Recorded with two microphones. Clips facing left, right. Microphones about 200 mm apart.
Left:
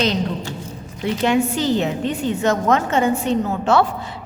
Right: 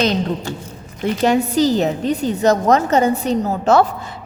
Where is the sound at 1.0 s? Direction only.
40° right (ahead or behind).